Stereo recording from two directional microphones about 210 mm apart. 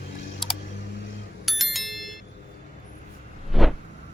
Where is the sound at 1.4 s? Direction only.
Centre (ahead or behind).